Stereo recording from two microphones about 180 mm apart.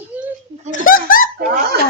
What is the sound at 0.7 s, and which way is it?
Speech, 50° left (ahead or behind).